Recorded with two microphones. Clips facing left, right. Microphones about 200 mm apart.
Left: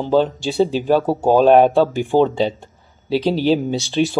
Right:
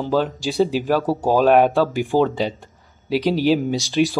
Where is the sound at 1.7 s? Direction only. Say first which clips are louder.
Left 3 dB; centre (ahead or behind).